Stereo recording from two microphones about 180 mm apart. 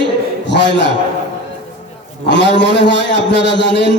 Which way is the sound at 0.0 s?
75° left (ahead or behind).